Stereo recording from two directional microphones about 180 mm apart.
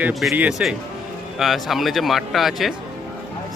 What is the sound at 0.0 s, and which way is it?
A man's voice, centre (ahead or behind).